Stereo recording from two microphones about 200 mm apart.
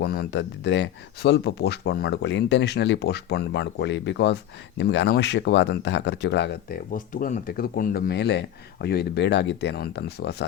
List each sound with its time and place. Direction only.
0.0 s speech: 55° left (ahead or behind)